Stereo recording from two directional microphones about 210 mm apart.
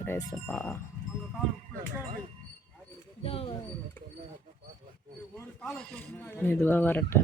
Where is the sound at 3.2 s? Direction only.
25° left (ahead or behind).